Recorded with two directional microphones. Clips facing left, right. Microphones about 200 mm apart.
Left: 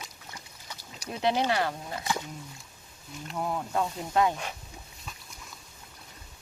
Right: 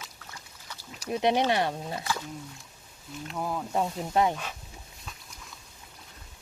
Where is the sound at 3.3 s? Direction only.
Centre (ahead or behind).